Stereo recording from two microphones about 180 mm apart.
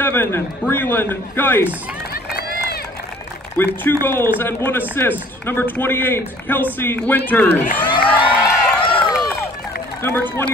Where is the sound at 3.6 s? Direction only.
10° left (ahead or behind).